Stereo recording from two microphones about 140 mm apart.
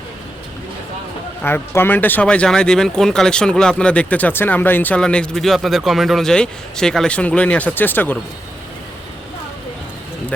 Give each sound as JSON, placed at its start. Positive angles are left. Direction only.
{"t": 1.5, "sound": "speech", "side_deg": 15}